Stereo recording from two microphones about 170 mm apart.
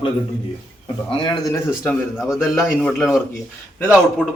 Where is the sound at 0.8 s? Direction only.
30° left (ahead or behind).